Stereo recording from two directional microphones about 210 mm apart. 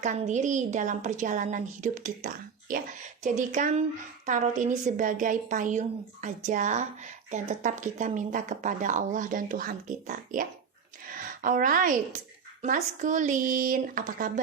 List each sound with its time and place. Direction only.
0.0 s a woman's voice: 35° right (ahead or behind)